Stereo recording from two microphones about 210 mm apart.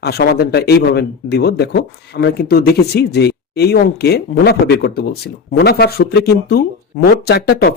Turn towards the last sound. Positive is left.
turn(degrees=50)  # may be behind; listen again after turning